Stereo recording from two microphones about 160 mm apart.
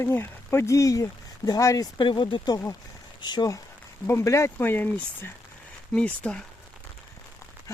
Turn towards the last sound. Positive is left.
turn(degrees=5)  # may be behind; listen again after turning